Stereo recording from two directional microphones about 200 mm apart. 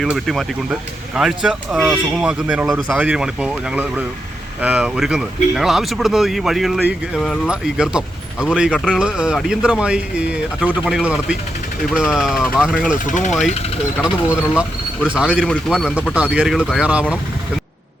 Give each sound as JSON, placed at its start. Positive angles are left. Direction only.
{"t": 0.0, "sound": "speech", "side_deg": 0}
{"t": 12.9, "sound": "speech", "side_deg": 40}
{"t": 14.0, "sound": "speech", "side_deg": -5}